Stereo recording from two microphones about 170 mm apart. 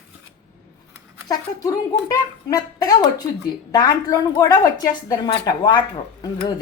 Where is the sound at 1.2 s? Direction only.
20° left (ahead or behind).